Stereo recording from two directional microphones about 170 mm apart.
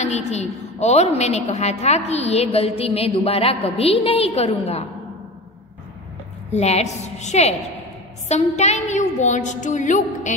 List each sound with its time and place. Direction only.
0.0 s a woman's voice: 40° left (ahead or behind)
6.5 s a woman's voice: 40° left (ahead or behind)